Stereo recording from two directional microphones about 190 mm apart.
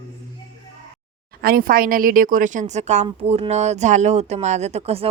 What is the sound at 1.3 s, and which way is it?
Speech, 50° right (ahead or behind).